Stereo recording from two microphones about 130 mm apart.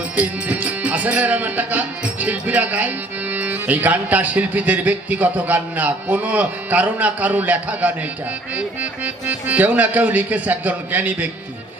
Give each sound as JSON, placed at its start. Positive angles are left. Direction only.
{"t": 0.2, "sound": "music", "side_deg": -10}